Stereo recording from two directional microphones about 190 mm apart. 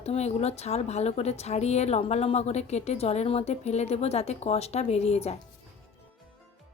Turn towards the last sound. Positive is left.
turn(degrees=35)  # may be behind; listen again after turning